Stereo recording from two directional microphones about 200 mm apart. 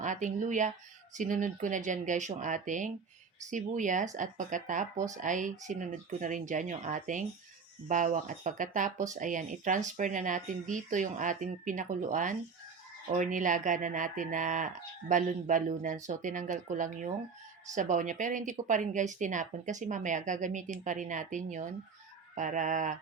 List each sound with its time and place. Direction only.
0.0 s speech: 40° right (ahead or behind)